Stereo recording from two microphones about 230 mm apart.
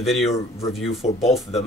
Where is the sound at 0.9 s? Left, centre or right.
Left.